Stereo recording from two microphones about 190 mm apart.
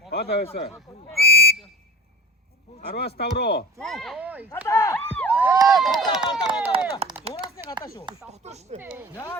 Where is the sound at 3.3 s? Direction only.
60° left (ahead or behind).